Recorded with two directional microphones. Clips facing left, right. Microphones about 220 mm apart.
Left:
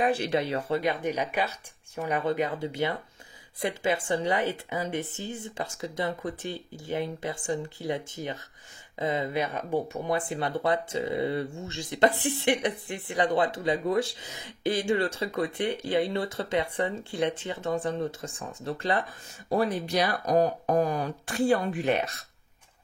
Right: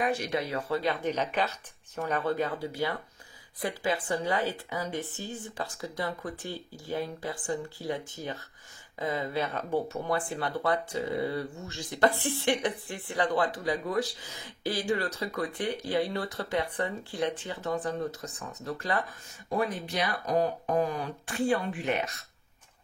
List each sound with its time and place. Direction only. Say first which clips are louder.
0.0 s speech: left 4 dB; 30° left (ahead or behind)